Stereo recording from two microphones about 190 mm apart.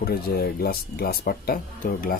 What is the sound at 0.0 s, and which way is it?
Speech, 55° left (ahead or behind).